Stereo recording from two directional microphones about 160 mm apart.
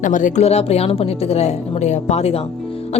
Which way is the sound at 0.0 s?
55° left (ahead or behind).